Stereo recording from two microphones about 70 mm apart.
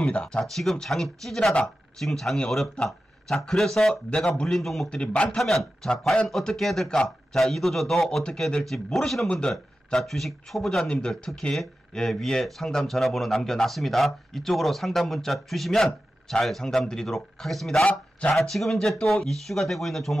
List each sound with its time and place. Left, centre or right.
0.1 s speech: centre
4.8 s speech: centre
5.4 s speech: centre